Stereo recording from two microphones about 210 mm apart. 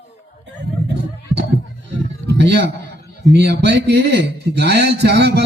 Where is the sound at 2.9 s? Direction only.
55° right (ahead or behind).